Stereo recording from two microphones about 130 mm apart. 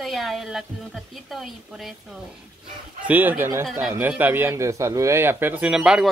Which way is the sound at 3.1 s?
15° right (ahead or behind).